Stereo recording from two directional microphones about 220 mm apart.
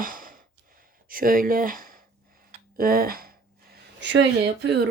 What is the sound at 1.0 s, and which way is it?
Speech, 40° right (ahead or behind).